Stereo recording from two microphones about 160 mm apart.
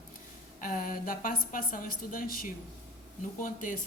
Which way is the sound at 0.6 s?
55° left (ahead or behind).